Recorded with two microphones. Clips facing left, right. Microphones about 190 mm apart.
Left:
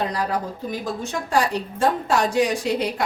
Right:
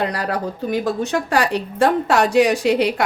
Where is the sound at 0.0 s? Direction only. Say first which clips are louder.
Right 2 dB; 70° right (ahead or behind).